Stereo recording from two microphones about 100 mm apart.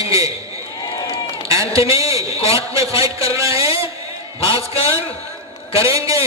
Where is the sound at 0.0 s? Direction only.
35° right (ahead or behind).